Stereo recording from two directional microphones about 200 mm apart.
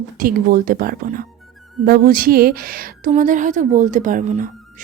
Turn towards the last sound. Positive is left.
turn(degrees=-40)  # may be behind; listen again after turning